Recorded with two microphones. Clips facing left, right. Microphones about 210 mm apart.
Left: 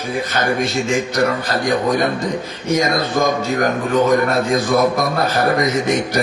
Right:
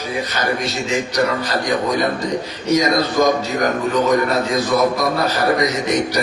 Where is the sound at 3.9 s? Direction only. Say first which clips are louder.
Left 3 dB; 50° left (ahead or behind).